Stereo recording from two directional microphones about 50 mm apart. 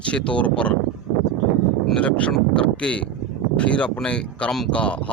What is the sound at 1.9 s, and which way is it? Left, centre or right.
Speech, left.